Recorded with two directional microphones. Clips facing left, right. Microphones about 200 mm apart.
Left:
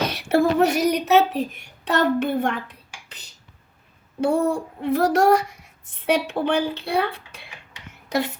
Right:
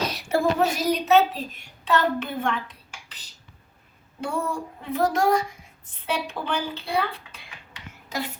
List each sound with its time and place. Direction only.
0.0 s a woman's voice: 65° left (ahead or behind)
4.2 s child singing: 70° left (ahead or behind)